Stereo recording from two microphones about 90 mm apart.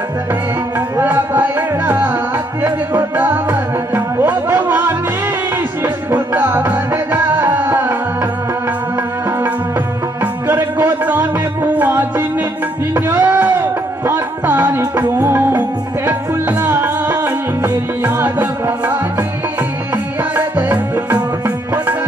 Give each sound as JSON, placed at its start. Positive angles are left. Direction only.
{"t": 0.7, "sound": "music", "side_deg": -25}
{"t": 6.0, "sound": "music", "side_deg": -25}
{"t": 10.2, "sound": "music", "side_deg": -20}
{"t": 12.9, "sound": "a sound", "side_deg": -25}
{"t": 15.0, "sound": "music", "side_deg": -25}
{"t": 20.3, "sound": "music", "side_deg": -25}